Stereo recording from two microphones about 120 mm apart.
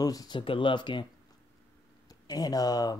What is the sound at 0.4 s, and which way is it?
Speech, 45° left (ahead or behind).